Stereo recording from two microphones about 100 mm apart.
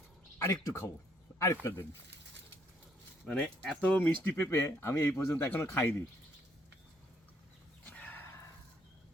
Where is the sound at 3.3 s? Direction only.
10° left (ahead or behind).